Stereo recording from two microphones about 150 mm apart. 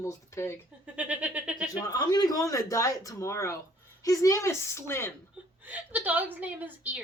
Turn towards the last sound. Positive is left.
turn(degrees=-10)  # may be behind; listen again after turning